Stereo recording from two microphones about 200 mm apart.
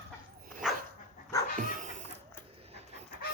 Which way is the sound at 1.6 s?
40° right (ahead or behind).